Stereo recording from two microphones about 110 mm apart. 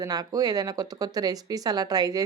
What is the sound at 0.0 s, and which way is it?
Speech, 35° right (ahead or behind).